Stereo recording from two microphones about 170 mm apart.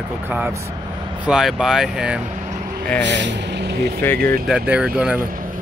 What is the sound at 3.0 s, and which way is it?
Speech, 90° right.